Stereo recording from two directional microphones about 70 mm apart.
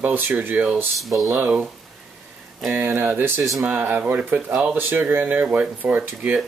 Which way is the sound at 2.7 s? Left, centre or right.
Right.